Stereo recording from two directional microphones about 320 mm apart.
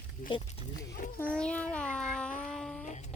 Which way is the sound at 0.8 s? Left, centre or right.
Left.